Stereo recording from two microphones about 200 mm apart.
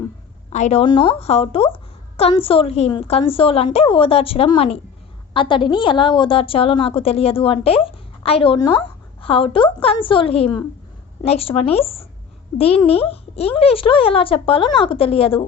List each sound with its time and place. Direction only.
0.5 s a woman's voice: 35° left (ahead or behind)